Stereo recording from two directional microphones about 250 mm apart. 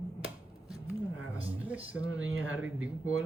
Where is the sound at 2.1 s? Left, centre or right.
Right.